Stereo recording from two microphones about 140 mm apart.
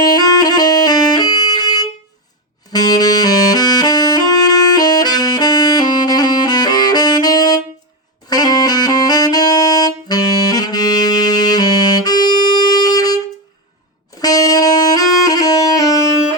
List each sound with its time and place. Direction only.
0.0 s music: 30° left (ahead or behind)
2.7 s saxophone: 30° left (ahead or behind)
14.2 s music: 25° left (ahead or behind)